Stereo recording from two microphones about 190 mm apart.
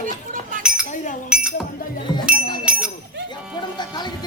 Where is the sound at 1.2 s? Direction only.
5° right (ahead or behind).